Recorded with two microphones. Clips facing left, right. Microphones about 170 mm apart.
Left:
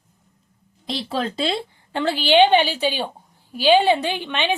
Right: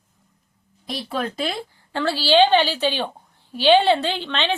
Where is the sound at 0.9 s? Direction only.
30° left (ahead or behind).